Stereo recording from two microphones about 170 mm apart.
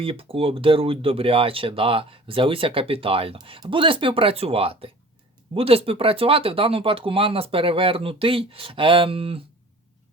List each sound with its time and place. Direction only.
0.0 s speech: 35° right (ahead or behind)